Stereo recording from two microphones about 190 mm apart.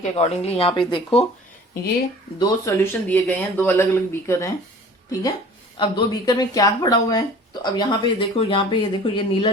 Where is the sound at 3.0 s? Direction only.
10° left (ahead or behind).